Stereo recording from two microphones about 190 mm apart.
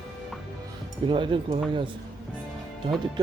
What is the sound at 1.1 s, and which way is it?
Speech, 25° right (ahead or behind).